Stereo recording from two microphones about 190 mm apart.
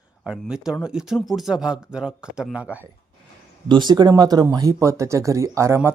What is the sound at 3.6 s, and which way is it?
Speech, 25° right (ahead or behind).